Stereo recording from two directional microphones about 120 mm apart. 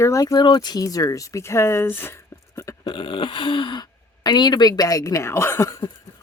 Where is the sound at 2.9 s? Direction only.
45° left (ahead or behind); by 5.8 s 25° left (ahead or behind).